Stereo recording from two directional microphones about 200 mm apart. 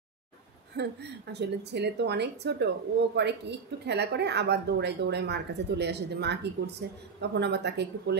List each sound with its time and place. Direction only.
0.7 s speech: 55° right (ahead or behind)